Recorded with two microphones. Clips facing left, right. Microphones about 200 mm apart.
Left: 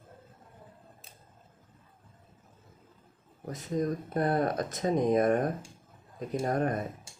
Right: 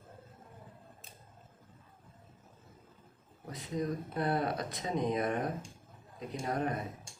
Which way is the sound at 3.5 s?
45° left (ahead or behind).